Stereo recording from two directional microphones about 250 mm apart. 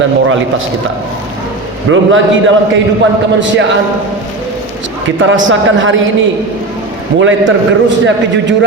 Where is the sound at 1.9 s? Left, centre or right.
Right.